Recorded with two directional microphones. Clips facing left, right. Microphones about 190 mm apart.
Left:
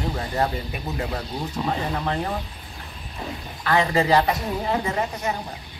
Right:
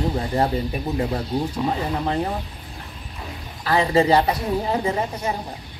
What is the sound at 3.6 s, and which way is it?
Speech, 30° right (ahead or behind).